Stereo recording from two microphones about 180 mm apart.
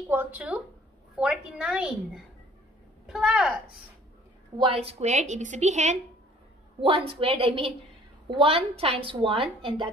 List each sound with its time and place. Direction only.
0.1 s a woman's voice: 10° right (ahead or behind)
3.1 s a woman's voice: 5° right (ahead or behind)
4.6 s a woman's voice: 30° right (ahead or behind)
6.8 s a woman's voice: 30° right (ahead or behind)